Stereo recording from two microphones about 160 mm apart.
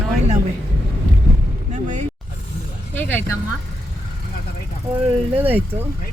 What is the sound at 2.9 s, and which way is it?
Speech, 10° left (ahead or behind).